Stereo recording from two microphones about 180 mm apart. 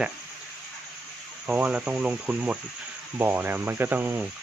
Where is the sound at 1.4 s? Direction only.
5° right (ahead or behind).